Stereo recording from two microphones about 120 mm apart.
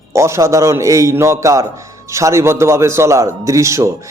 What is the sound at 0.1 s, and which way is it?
A man's voice, 25° right (ahead or behind).